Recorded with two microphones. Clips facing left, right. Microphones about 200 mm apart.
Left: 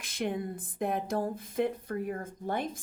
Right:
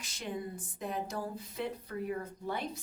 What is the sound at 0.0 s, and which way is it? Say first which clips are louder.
Speech: left 6 dB; 55° left (ahead or behind).